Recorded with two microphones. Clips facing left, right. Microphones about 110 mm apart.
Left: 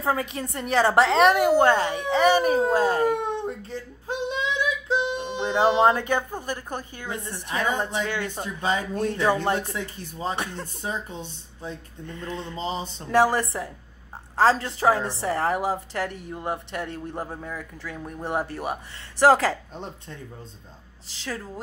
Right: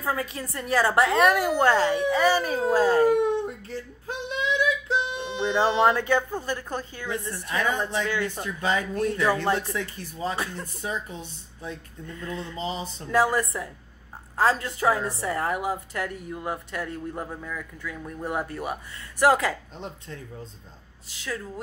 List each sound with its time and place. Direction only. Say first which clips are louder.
0.0 s a woman's voice: left 3 dB; 25° left (ahead or behind)
2.4 s speech: left 3 dB; 50° left (ahead or behind)
2.8 s speech: right 2 dB; 15° left (ahead or behind)
3.4 s a sound: left 2 dB; 20° left (ahead or behind)
7.1 s a woman's voice: right 1 dB; 20° left (ahead or behind)
17.9 s a woman's voice: left 2 dB; 20° left (ahead or behind)
21.1 s a woman's voice: even; 30° left (ahead or behind)